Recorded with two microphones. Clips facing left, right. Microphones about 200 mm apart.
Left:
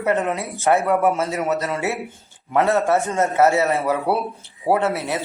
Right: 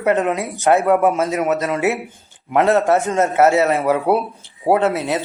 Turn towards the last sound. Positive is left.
turn(degrees=-20)  # may be behind; listen again after turning